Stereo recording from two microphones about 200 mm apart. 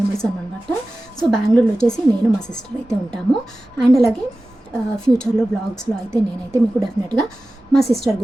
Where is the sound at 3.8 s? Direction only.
Centre (ahead or behind).